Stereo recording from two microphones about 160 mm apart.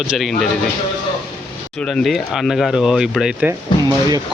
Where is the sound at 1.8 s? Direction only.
Centre (ahead or behind).